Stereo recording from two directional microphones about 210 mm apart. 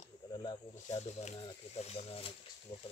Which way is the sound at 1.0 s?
35° left (ahead or behind).